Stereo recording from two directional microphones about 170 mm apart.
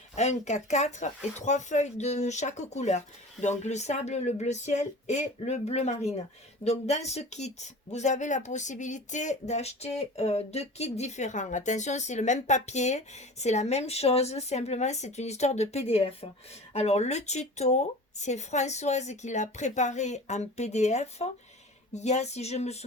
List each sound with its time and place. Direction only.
0.2 s speech: 40° left (ahead or behind)